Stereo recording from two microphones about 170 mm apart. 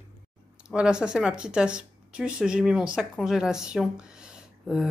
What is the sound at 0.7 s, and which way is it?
Speech, 5° right (ahead or behind).